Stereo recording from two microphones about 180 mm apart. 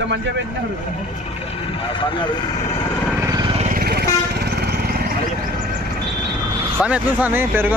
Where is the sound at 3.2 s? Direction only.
20° right (ahead or behind).